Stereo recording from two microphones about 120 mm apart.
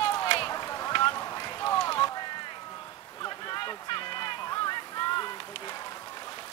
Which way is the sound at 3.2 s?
40° left (ahead or behind).